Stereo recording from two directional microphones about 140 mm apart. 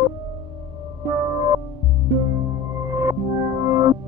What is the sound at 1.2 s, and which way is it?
Music, 25° right (ahead or behind).